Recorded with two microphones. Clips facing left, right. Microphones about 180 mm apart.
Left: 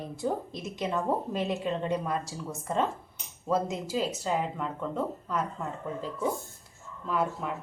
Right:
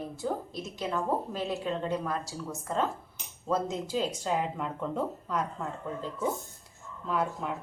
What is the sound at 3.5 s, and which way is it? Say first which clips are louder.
Speech: left 1 dB; 10° left (ahead or behind).